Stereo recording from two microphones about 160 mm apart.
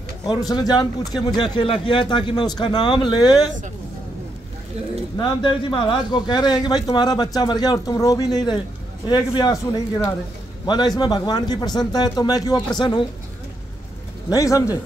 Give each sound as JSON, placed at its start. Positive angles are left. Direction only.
{"t": 0.3, "sound": "a man's voice", "side_deg": 25}
{"t": 5.1, "sound": "a man's voice", "side_deg": 25}
{"t": 14.3, "sound": "a man's voice", "side_deg": 20}